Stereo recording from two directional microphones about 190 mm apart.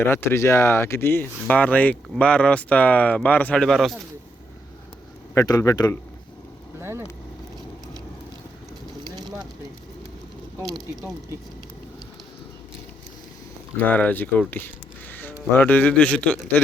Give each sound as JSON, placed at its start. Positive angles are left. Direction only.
{"t": 0.0, "sound": "speech", "side_deg": 10}
{"t": 5.3, "sound": "speech", "side_deg": 15}
{"t": 6.7, "sound": "vehicle", "side_deg": -15}
{"t": 13.7, "sound": "a man's voice", "side_deg": 10}